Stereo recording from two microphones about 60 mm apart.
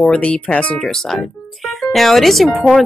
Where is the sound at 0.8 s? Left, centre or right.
Centre.